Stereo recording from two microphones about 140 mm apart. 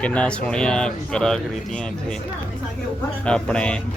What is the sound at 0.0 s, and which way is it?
Speech, 10° left (ahead or behind).